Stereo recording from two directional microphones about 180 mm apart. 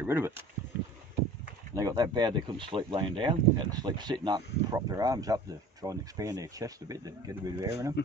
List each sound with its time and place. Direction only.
0.0 s speech: 10° right (ahead or behind)
1.8 s speech: 20° right (ahead or behind)